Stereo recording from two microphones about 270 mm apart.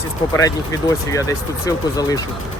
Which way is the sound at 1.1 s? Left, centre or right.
Centre.